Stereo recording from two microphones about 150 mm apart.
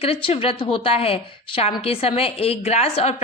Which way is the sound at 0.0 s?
40° left (ahead or behind).